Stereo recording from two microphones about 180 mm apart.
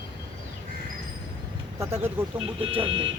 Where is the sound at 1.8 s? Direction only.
15° right (ahead or behind).